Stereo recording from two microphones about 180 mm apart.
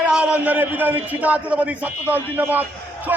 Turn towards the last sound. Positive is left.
turn(degrees=-10)  # may be behind; listen again after turning